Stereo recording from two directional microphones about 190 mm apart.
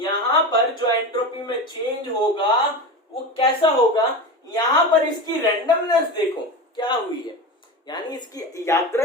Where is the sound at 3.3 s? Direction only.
30° left (ahead or behind).